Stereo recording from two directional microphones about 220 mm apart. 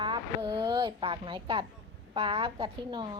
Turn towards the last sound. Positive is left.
turn(degrees=-20)  # may be behind; listen again after turning